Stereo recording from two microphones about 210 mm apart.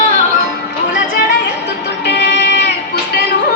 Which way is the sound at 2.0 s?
55° left (ahead or behind).